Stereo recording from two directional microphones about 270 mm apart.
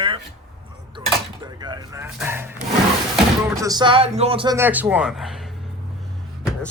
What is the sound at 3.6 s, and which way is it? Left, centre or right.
Speech, centre.